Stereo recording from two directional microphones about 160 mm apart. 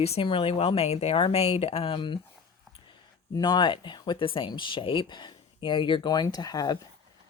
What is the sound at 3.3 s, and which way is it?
Speech, 25° left (ahead or behind).